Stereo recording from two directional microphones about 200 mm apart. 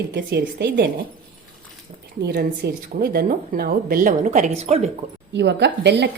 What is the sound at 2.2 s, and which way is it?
A woman's voice, 50° right (ahead or behind).